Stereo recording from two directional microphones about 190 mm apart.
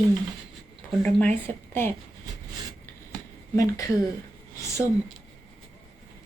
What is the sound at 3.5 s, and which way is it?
Speech, 20° left (ahead or behind).